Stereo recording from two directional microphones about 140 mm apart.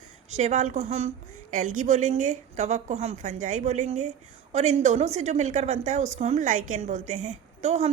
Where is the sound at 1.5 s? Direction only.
65° right (ahead or behind).